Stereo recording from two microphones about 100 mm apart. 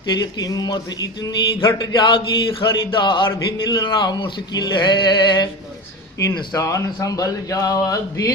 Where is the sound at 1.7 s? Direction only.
45° left (ahead or behind).